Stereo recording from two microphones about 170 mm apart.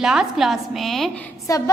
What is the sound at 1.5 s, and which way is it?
Speech, 20° left (ahead or behind).